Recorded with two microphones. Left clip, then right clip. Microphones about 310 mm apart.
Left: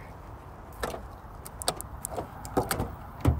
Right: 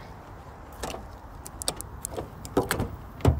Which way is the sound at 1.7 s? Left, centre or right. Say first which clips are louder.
Even; centre.